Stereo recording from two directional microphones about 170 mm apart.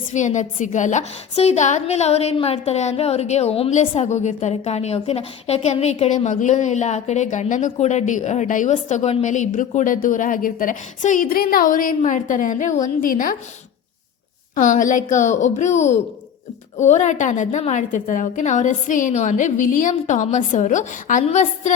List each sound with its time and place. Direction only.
0.1 s a woman's voice: 45° left (ahead or behind)
14.5 s a woman's voice: 50° left (ahead or behind)